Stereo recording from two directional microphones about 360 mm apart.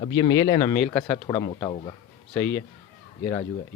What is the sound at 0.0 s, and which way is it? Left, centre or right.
Speech, centre.